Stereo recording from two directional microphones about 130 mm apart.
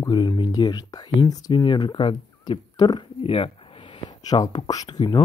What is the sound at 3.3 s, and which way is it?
Speech, 50° left (ahead or behind).